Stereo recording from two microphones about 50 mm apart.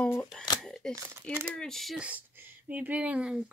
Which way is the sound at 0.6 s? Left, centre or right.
Centre.